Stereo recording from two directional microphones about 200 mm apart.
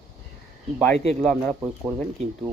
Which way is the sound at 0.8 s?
Centre (ahead or behind).